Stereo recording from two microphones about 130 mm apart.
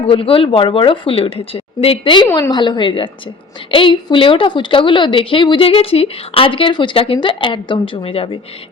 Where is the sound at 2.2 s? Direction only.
20° left (ahead or behind).